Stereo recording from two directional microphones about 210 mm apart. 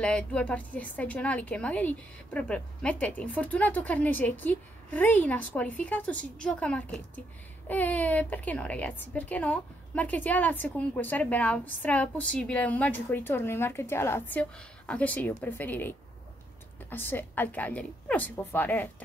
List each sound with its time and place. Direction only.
0.0 s a woman's voice: 5° left (ahead or behind)
16.9 s a woman's voice: 10° left (ahead or behind)